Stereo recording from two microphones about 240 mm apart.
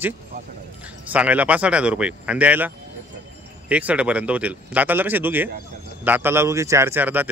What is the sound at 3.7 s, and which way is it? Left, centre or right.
A man's voice, centre.